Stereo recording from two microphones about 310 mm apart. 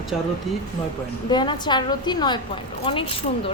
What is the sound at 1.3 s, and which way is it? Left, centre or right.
A woman's voice, centre.